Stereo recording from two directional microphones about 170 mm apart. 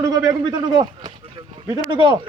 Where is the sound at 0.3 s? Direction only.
25° right (ahead or behind).